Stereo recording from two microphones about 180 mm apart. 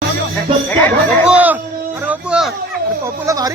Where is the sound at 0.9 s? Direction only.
10° left (ahead or behind).